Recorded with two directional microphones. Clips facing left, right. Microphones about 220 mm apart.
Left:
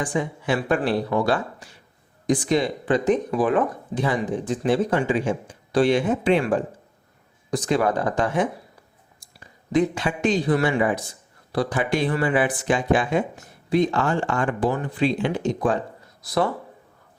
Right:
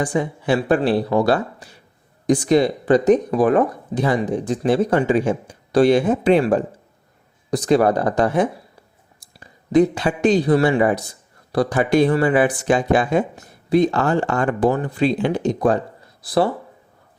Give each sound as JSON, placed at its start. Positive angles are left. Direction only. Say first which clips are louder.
{"t": 0.0, "sound": "speech", "louder": "right 4 dB", "side_deg": -35}
{"t": 9.2, "sound": "a sound", "louder": "right 5 dB", "side_deg": -35}
{"t": 9.7, "sound": "speech", "louder": "right 5 dB", "side_deg": -35}